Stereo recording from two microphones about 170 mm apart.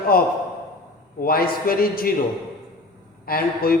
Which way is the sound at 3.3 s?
60° left (ahead or behind).